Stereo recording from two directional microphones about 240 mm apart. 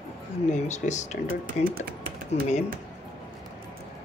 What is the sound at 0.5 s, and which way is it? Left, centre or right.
Speech, left.